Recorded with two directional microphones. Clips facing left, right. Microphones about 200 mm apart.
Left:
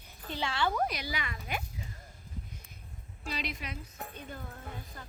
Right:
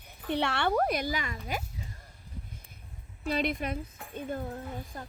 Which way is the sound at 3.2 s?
55° right (ahead or behind).